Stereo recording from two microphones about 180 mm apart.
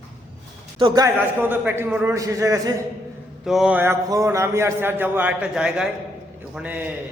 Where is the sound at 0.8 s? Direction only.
20° right (ahead or behind).